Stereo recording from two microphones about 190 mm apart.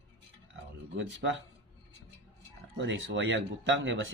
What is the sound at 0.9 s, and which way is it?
Speech, 75° right (ahead or behind).